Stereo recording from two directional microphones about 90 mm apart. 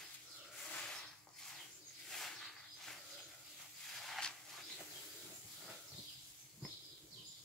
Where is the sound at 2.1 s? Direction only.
5° left (ahead or behind).